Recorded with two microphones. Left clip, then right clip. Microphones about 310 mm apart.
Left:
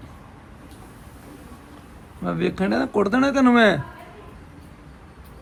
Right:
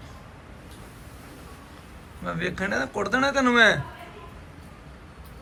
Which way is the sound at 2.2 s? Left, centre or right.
Centre.